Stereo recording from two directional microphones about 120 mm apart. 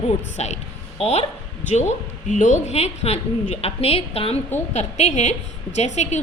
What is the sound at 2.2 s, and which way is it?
A woman's voice, 90° left.